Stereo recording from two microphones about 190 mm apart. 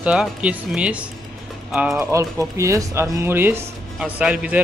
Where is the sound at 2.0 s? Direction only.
15° right (ahead or behind).